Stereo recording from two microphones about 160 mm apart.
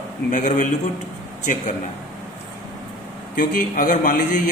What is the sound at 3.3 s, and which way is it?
Speech, 60° left (ahead or behind).